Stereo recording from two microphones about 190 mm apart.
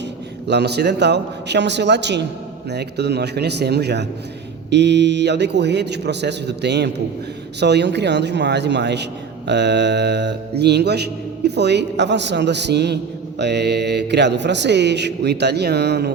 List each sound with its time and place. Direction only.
0.4 s a man's voice: 60° right (ahead or behind)